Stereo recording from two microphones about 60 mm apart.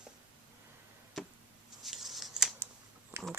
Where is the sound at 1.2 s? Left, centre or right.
Centre.